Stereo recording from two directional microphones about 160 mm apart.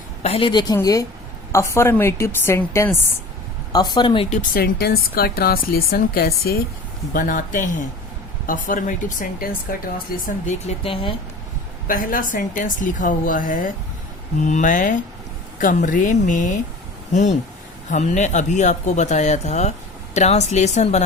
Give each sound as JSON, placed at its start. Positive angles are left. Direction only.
{"t": 0.2, "sound": "a woman's voice", "side_deg": 35}
{"t": 3.7, "sound": "a woman's voice", "side_deg": 25}
{"t": 4.3, "sound": "speech", "side_deg": 60}
{"t": 7.1, "sound": "a woman's voice", "side_deg": 55}
{"t": 10.2, "sound": "speech", "side_deg": 50}
{"t": 11.9, "sound": "a woman's voice", "side_deg": 60}